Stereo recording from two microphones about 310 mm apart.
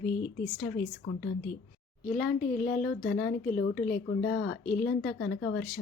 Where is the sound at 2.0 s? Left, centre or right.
Centre.